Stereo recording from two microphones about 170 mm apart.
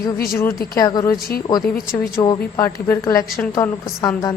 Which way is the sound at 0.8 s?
20° left (ahead or behind).